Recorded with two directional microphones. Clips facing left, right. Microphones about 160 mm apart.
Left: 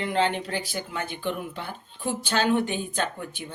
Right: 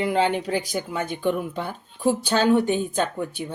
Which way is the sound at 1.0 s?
45° right (ahead or behind).